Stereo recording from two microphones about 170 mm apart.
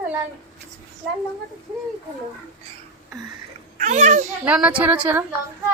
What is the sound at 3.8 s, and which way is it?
Speech, 45° right (ahead or behind).